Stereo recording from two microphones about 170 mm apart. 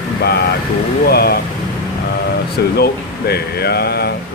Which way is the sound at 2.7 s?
70° left (ahead or behind).